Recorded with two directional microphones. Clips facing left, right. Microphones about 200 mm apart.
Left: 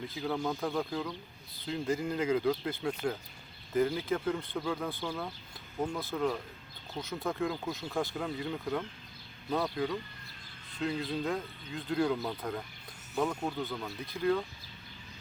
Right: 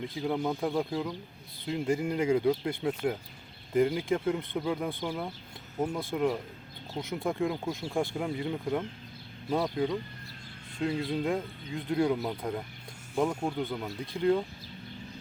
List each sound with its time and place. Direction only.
0.2 s speech: 20° right (ahead or behind)
13.2 s speech: 10° right (ahead or behind)
13.6 s speech: 20° right (ahead or behind)